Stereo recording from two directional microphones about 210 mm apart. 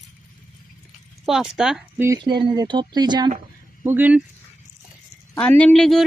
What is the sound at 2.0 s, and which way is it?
Speech, 20° right (ahead or behind).